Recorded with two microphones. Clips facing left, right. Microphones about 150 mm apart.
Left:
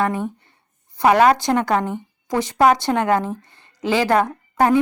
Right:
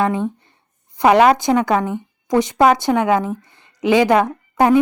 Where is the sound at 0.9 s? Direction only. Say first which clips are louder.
Right 2 dB; 15° right (ahead or behind).